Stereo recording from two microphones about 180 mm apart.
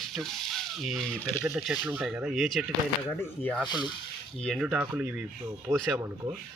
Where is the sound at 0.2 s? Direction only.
Centre (ahead or behind).